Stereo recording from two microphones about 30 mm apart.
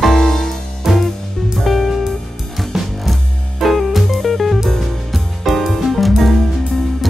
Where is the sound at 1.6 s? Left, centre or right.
Centre.